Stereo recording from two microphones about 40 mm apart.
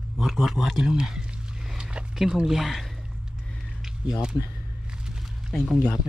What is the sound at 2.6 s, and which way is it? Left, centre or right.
Speech, centre.